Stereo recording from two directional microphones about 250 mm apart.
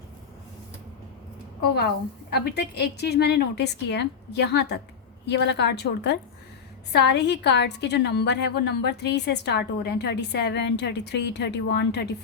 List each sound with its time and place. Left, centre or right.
1.6 s a woman's voice: left